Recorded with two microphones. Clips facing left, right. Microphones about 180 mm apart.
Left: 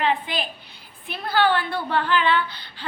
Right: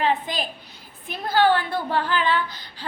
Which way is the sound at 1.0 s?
45° right (ahead or behind).